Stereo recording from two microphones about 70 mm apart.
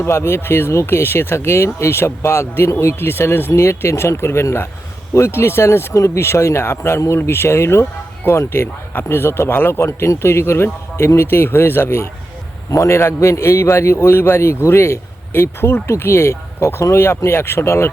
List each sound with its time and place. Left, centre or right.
0.0 s speech: left
12.7 s speech: left